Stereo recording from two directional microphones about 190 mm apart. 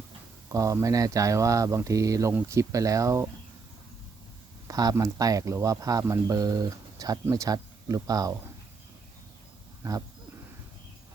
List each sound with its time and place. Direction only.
0.4 s speech: 15° right (ahead or behind)
4.7 s speech: 20° right (ahead or behind)
9.8 s speech: 15° right (ahead or behind)